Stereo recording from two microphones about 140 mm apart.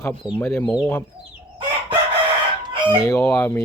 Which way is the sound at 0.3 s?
15° left (ahead or behind).